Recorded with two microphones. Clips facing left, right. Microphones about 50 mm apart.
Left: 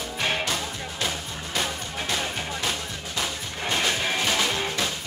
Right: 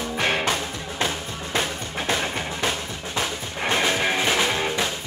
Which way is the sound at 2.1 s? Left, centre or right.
Right.